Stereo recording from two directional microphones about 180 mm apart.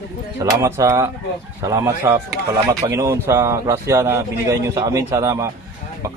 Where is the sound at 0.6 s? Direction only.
15° right (ahead or behind).